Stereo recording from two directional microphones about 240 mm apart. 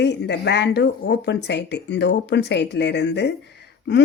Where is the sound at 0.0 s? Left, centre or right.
Left.